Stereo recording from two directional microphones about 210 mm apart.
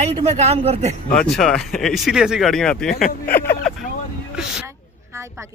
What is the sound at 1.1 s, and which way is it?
Speech, centre (ahead or behind).